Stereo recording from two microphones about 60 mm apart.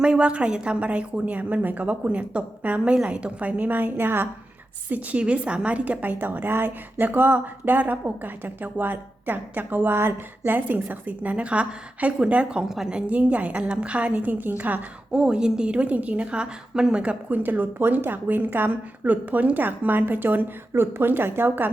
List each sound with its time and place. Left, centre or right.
0.0 s a woman's voice: centre; by 4.3 s right
4.9 s a woman's voice: right
12.6 s a woman's voice: centre; by 14.5 s right
15.1 s a woman's voice: centre; by 21.7 s right